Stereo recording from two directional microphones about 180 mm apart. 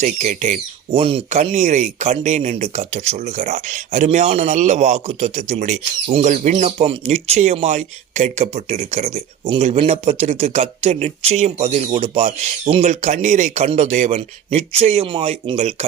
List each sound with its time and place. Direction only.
0.0 s speech: 40° right (ahead or behind)